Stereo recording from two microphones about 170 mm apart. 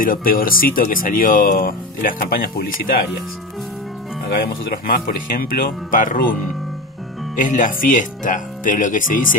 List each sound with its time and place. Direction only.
0.0 s speech: 55° left (ahead or behind)
4.4 s speech: 60° left (ahead or behind)
7.3 s speech: 50° left (ahead or behind)